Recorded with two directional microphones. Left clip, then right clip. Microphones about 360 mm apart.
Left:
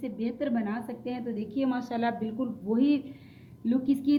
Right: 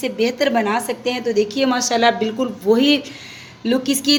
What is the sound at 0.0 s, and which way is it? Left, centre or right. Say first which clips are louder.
A woman's voice: right 15 dB; right.